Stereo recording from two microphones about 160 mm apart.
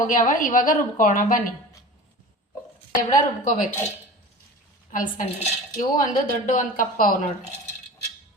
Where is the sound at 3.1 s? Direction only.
55° left (ahead or behind).